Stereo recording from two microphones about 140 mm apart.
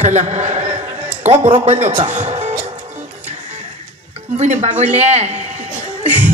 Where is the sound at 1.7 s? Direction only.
50° right (ahead or behind).